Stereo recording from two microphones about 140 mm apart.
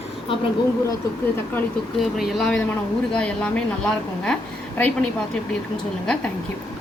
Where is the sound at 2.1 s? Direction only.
Centre (ahead or behind).